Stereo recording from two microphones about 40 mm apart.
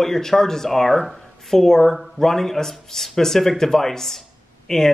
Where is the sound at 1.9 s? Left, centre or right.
Centre.